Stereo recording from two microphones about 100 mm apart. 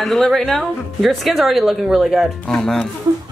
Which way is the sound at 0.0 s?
5° left (ahead or behind).